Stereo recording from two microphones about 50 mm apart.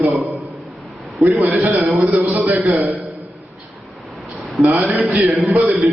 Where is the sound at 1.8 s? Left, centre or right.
Right.